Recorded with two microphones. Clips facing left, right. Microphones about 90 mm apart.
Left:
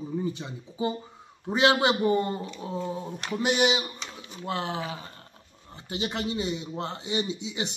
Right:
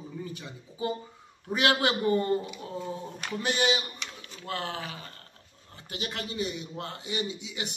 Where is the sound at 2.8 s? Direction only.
Centre (ahead or behind).